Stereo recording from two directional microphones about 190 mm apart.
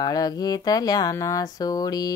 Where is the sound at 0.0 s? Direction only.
20° left (ahead or behind).